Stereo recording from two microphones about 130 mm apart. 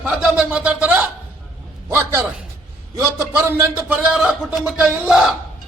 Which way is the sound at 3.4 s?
20° right (ahead or behind).